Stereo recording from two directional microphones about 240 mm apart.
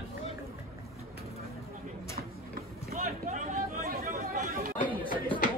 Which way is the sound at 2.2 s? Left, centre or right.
Right.